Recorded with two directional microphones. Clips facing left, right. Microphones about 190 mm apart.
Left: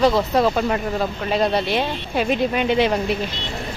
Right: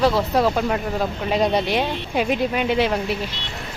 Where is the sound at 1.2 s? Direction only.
15° right (ahead or behind).